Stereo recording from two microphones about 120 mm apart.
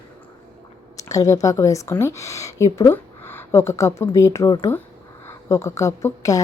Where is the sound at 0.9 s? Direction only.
30° left (ahead or behind).